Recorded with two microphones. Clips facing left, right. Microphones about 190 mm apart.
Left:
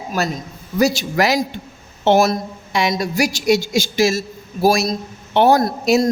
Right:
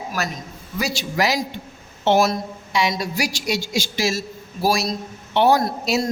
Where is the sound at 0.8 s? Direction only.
45° left (ahead or behind).